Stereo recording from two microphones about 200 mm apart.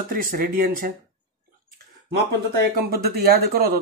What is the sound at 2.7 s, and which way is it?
Speech, 50° right (ahead or behind).